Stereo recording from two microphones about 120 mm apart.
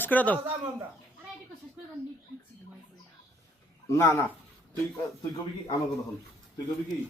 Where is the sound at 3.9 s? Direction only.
20° left (ahead or behind).